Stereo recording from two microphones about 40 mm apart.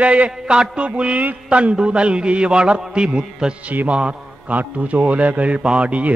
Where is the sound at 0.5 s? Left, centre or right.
Right.